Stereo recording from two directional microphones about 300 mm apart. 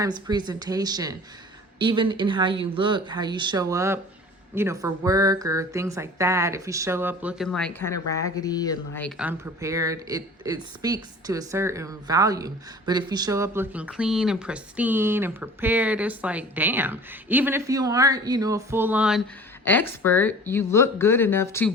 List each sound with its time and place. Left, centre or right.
0.0 s speech: centre
19.6 s speech: centre